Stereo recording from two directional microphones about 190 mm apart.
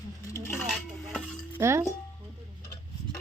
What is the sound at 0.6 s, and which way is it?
Cutlery, centre (ahead or behind).